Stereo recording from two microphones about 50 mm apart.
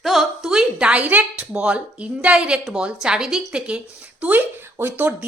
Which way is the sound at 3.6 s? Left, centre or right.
Right.